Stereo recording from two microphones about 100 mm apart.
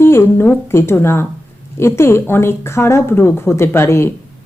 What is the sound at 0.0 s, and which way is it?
A woman's voice, 25° left (ahead or behind).